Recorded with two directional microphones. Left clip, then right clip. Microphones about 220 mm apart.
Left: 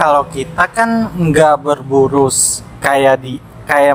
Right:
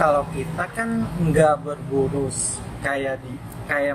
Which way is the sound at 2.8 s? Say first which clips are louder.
Left 14 dB; 50° left (ahead or behind).